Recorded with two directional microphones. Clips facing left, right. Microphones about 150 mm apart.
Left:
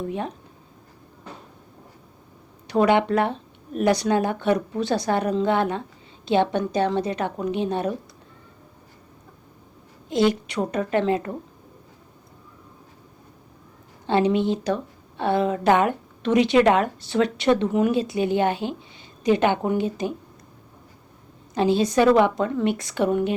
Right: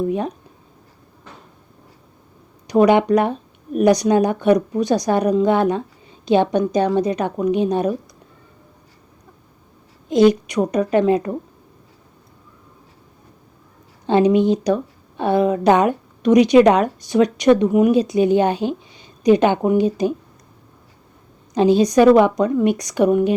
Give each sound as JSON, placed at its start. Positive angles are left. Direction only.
{"t": 0.1, "sound": "speech", "side_deg": -15}
{"t": 2.6, "sound": "speech", "side_deg": -15}
{"t": 10.4, "sound": "speech", "side_deg": -15}
{"t": 14.1, "sound": "speech", "side_deg": -15}
{"t": 21.5, "sound": "speech", "side_deg": -15}